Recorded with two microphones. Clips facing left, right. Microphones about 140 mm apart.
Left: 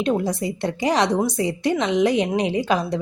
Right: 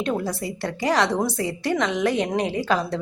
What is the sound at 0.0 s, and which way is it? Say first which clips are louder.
A woman's voice: left 4 dB; 20° left (ahead or behind).